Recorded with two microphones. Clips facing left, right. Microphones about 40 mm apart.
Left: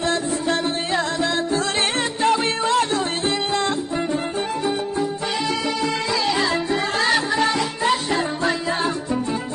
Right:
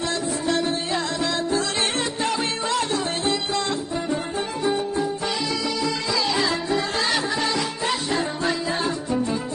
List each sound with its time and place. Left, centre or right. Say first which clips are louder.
0.0 s music: left 3 dB; left
5.4 s music: left 2 dB; left